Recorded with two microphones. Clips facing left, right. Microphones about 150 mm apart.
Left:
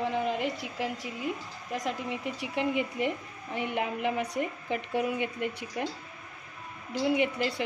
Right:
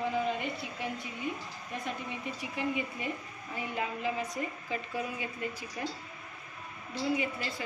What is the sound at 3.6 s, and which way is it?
A woman's voice, 70° left (ahead or behind).